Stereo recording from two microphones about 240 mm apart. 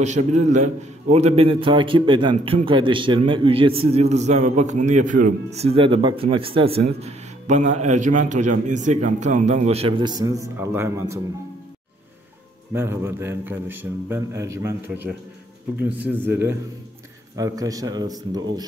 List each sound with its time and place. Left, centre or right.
0.0 s a man's voice: right; by 11.1 s centre
12.7 s a man's voice: centre
17.4 s a man's voice: centre